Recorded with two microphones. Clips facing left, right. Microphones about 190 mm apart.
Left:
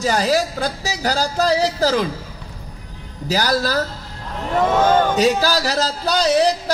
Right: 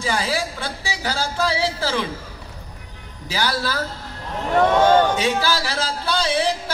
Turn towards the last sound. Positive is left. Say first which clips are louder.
# left 5 dB
turn(degrees=40)  # may be behind; listen again after turning